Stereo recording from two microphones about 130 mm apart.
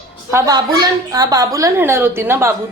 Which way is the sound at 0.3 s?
20° right (ahead or behind).